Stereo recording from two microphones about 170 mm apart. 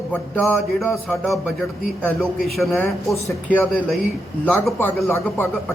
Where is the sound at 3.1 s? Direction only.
15° left (ahead or behind).